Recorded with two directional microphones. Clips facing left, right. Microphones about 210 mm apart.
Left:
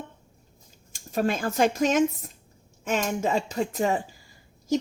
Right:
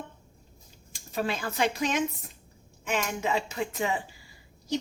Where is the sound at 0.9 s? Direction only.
45° left (ahead or behind).